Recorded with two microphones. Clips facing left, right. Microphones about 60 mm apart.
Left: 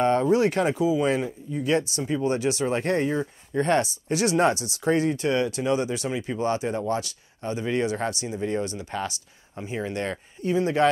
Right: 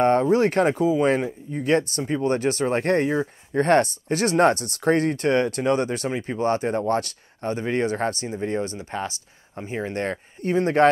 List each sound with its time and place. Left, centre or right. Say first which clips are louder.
0.0 s speech: right 2 dB; right